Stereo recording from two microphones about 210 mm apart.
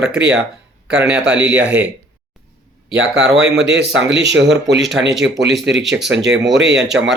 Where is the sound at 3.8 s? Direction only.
55° right (ahead or behind).